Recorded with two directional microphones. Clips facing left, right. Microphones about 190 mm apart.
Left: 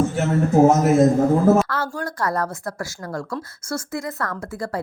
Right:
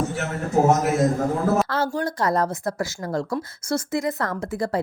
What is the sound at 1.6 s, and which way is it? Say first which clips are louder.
A woman's voice: right 3 dB; 25° right (ahead or behind).